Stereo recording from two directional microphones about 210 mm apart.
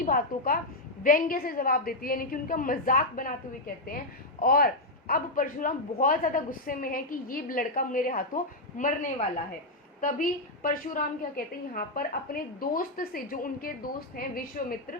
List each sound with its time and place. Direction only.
0.0 s a woman's voice: 45° left (ahead or behind)
4.4 s a man's voice: 45° left (ahead or behind)